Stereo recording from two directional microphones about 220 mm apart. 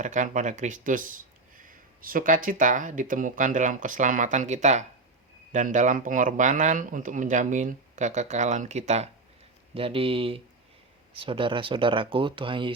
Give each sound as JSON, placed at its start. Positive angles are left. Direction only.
{"t": 0.0, "sound": "speech", "side_deg": -35}